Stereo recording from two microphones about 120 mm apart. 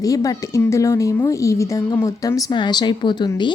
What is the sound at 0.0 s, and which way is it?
A woman's voice, 30° left (ahead or behind).